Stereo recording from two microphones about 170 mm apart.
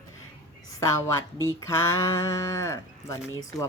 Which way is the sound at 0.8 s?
20° left (ahead or behind).